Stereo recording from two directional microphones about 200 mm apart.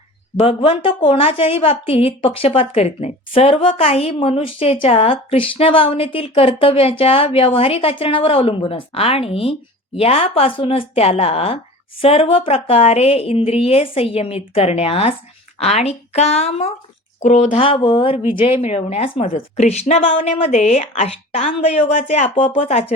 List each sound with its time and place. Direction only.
0.3 s a woman's voice: 30° left (ahead or behind)